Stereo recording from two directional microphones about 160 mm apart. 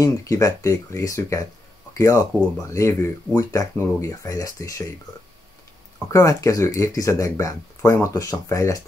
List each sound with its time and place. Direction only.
0.0 s speech: 20° left (ahead or behind)
6.0 s speech: 20° left (ahead or behind)